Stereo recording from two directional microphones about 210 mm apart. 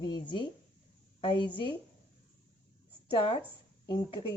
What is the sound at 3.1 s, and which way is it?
Speech, 25° left (ahead or behind).